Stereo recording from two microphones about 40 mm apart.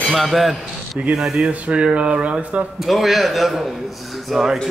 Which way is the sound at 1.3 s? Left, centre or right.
Right.